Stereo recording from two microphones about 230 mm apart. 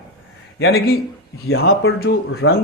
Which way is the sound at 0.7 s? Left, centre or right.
Left.